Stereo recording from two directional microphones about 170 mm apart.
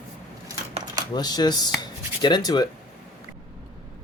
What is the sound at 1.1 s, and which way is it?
Speech, 25° left (ahead or behind).